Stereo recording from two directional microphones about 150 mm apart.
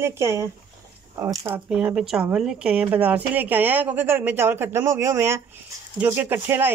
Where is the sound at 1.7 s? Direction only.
5° right (ahead or behind).